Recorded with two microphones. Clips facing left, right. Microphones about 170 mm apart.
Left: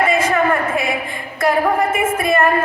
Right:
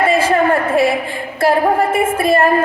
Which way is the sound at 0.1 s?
30° right (ahead or behind).